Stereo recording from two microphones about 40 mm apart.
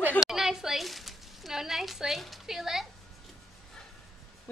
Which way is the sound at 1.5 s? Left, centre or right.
Centre.